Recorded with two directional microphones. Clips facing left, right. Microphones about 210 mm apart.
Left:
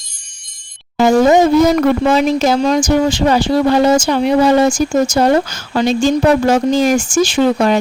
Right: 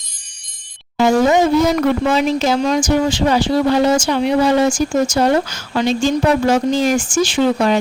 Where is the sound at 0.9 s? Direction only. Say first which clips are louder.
Left 3 dB; 45° left (ahead or behind).